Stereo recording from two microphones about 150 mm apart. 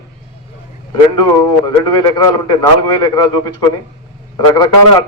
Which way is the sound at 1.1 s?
30° left (ahead or behind).